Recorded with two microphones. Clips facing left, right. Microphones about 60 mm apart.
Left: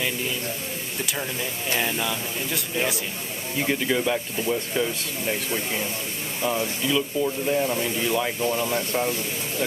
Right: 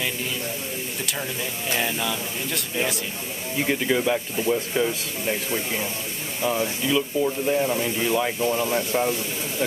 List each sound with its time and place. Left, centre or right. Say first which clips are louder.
1.0 s speech: left 2 dB; centre